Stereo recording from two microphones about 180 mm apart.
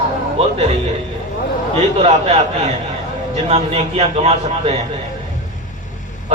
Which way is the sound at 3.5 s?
35° right (ahead or behind).